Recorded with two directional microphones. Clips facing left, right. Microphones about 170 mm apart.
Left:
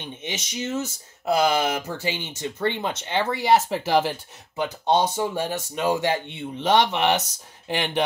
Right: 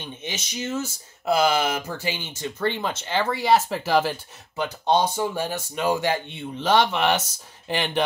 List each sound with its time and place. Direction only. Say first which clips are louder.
0.0 s speech: left 1 dB; 20° left (ahead or behind)